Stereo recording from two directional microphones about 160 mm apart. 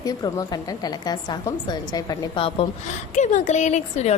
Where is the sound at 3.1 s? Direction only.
50° left (ahead or behind).